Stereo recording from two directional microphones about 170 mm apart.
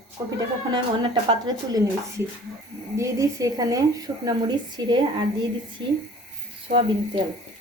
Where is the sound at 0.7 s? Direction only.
25° right (ahead or behind).